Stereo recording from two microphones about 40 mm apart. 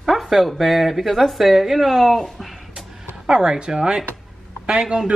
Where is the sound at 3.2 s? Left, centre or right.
Centre.